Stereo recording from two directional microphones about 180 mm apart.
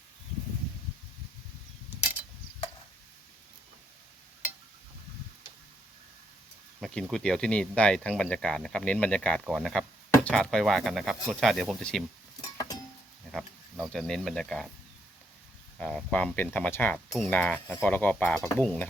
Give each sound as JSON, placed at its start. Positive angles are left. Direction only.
{"t": 6.7, "sound": "speech", "side_deg": 0}
{"t": 12.5, "sound": "music", "side_deg": 20}
{"t": 13.3, "sound": "speech", "side_deg": 0}
{"t": 15.8, "sound": "speech", "side_deg": 5}
{"t": 17.1, "sound": "a sound", "side_deg": 0}
{"t": 17.3, "sound": "speech", "side_deg": 10}